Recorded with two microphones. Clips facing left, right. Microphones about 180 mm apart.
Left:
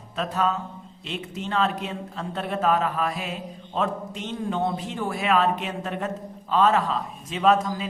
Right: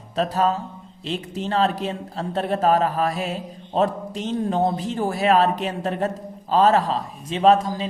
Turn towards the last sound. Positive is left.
turn(degrees=-30)  # may be behind; listen again after turning